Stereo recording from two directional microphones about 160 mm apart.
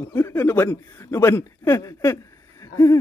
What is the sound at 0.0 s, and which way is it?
Speech, 15° left (ahead or behind).